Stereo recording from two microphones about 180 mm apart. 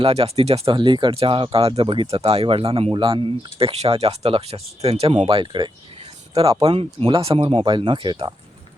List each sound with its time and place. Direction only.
0.0 s speech: 35° right (ahead or behind)